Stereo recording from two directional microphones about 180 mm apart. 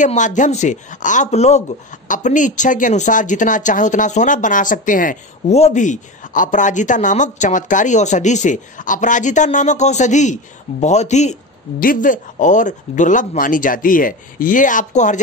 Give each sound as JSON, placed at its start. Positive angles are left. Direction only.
{"t": 0.0, "sound": "speech", "side_deg": 45}